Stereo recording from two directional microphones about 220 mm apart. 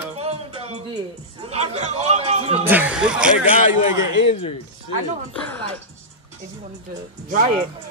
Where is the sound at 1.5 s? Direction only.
30° right (ahead or behind).